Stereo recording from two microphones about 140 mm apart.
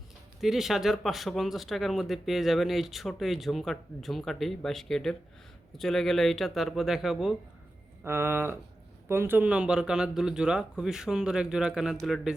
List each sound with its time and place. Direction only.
0.4 s speech: centre (ahead or behind)
8.0 s speech: 15° right (ahead or behind); by 12.3 s centre (ahead or behind)